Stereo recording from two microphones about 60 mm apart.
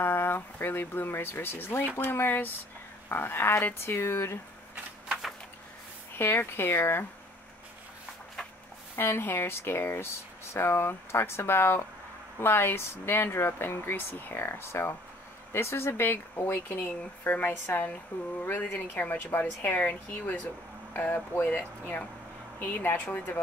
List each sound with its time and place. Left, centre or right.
0.0 s speech: left
6.1 s speech: left
8.9 s speech: left
17.3 s speech: left